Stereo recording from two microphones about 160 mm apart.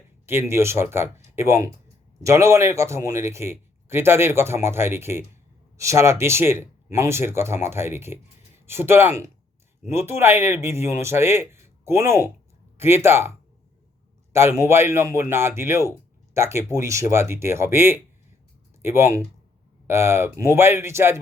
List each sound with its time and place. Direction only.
0.3 s speech: 15° right (ahead or behind)
14.3 s speech: 15° right (ahead or behind)